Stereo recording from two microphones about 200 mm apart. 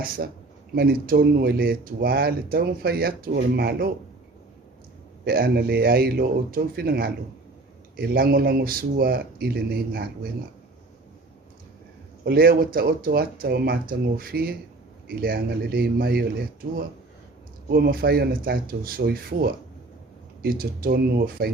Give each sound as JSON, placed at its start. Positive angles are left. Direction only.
{"t": 0.2, "sound": "speech", "side_deg": -50}
{"t": 5.2, "sound": "speech", "side_deg": -50}
{"t": 12.2, "sound": "speech", "side_deg": -50}
{"t": 17.7, "sound": "speech", "side_deg": -50}